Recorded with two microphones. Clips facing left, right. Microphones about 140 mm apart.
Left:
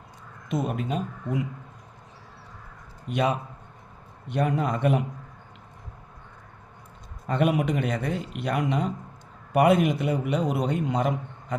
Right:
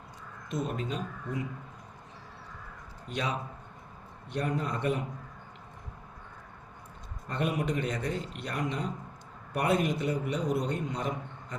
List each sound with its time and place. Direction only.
0.4 s a man's voice: 75° left (ahead or behind)
3.1 s a man's voice: 55° left (ahead or behind)
4.4 s a man's voice: 70° left (ahead or behind)
7.3 s a man's voice: 75° left (ahead or behind)